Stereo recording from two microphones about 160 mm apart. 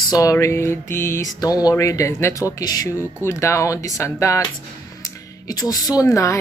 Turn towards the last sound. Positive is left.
turn(degrees=20)  # may be behind; listen again after turning